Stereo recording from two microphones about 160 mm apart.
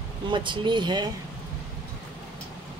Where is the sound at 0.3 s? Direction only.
30° right (ahead or behind).